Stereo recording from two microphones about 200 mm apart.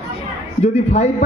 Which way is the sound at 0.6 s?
35° left (ahead or behind).